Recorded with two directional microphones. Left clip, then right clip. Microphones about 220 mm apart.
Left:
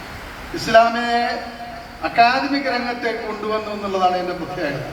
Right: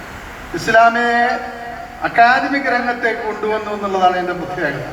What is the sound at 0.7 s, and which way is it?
A man's voice, 35° left (ahead or behind).